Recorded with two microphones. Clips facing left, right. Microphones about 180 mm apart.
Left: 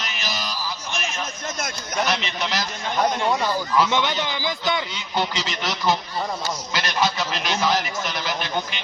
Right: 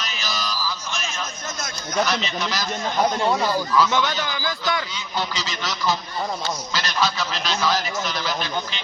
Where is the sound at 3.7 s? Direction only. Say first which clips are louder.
Left 1 dB; 20° left (ahead or behind).